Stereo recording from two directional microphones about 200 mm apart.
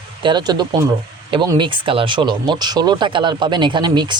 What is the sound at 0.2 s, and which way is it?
Speech, 25° right (ahead or behind).